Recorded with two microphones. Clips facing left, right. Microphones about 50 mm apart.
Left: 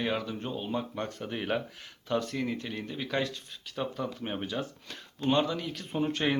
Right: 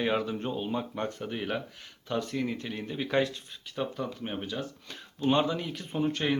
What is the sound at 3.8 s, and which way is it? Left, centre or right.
Speech, centre.